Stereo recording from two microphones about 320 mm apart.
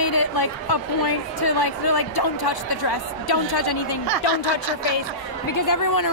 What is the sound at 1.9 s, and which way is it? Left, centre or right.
Speech, left.